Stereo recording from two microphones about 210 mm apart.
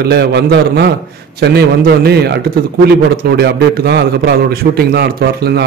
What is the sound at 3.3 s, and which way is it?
A man's voice, 50° right (ahead or behind).